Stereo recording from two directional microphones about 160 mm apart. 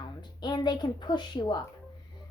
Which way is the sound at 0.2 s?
25° left (ahead or behind).